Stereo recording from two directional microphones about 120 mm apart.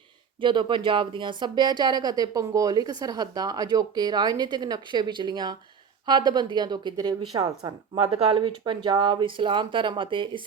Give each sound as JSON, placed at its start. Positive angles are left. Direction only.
{"t": 0.4, "sound": "a woman's voice", "side_deg": -40}
{"t": 8.1, "sound": "speech", "side_deg": -55}
{"t": 8.4, "sound": "a woman's voice", "side_deg": -40}